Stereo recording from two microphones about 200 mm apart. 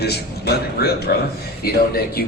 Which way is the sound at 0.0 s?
55° left (ahead or behind).